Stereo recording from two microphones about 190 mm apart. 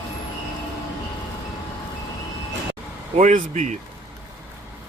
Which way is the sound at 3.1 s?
40° right (ahead or behind).